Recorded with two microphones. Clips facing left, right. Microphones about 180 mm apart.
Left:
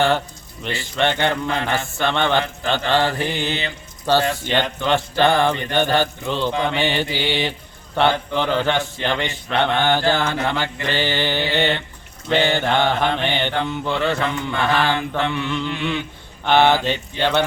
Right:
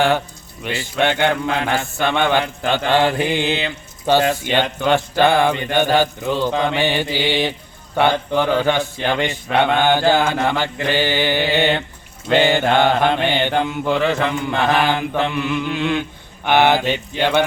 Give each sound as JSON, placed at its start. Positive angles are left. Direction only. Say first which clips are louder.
{"t": 0.6, "sound": "a man's voice", "louder": "right 2 dB", "side_deg": -15}